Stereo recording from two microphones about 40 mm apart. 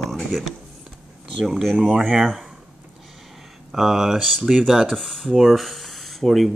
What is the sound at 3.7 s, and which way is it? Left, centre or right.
Mantra, centre.